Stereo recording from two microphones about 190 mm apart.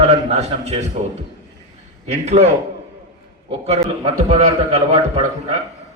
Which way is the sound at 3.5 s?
30° right (ahead or behind).